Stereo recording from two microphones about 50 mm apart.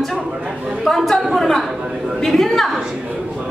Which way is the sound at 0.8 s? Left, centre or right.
Centre.